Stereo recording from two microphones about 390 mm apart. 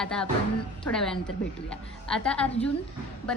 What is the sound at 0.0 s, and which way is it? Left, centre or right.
A woman's voice, centre.